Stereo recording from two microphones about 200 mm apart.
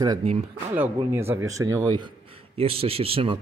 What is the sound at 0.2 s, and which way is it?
Speech, 30° right (ahead or behind).